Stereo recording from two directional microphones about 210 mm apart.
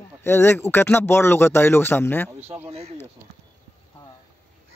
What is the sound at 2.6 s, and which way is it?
Speech, 30° right (ahead or behind).